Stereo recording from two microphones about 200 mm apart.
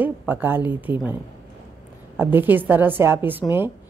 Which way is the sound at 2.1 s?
10° right (ahead or behind).